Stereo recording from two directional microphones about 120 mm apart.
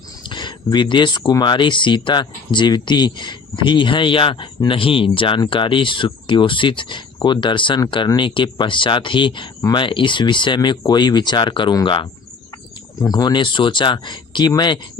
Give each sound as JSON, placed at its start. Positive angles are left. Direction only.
{"t": 0.2, "sound": "speech", "side_deg": 40}
{"t": 13.0, "sound": "speech", "side_deg": 30}